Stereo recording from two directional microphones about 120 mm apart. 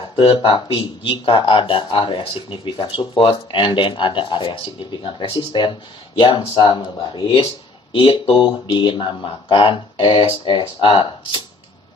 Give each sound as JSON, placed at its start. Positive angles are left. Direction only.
{"t": 0.2, "sound": "speech", "side_deg": 45}